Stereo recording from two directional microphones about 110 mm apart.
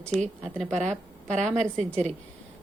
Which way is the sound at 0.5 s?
5° left (ahead or behind).